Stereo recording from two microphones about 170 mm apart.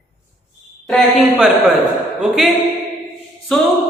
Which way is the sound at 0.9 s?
Centre (ahead or behind).